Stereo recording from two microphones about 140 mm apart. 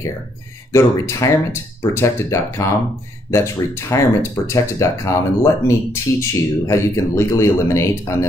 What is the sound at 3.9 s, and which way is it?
Speech, 20° left (ahead or behind).